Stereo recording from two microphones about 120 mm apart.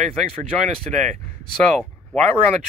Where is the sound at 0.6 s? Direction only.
90° right.